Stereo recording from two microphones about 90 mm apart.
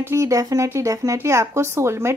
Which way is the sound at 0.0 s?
35° right (ahead or behind).